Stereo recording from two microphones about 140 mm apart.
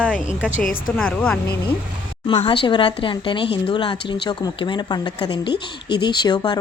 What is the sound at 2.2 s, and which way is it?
Speech, 35° left (ahead or behind).